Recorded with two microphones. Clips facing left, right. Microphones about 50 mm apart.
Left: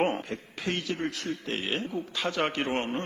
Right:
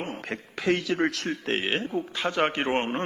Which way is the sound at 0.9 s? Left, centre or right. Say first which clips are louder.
Right 6 dB; right.